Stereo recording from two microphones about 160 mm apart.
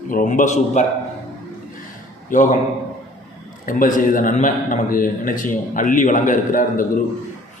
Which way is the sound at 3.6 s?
55° left (ahead or behind).